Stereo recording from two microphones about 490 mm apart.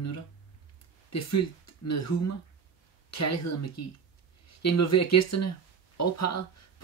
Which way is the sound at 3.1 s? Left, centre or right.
Left.